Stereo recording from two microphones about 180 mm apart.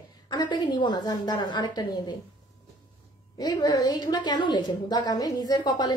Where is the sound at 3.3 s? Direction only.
20° left (ahead or behind).